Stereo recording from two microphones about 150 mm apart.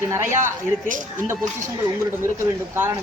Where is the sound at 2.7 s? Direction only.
15° right (ahead or behind).